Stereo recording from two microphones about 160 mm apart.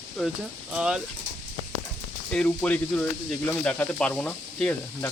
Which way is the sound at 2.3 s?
5° left (ahead or behind).